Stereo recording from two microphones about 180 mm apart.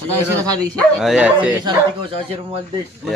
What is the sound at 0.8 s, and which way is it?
Speech, centre (ahead or behind).